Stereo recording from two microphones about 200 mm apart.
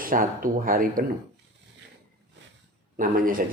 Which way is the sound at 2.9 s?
45° right (ahead or behind).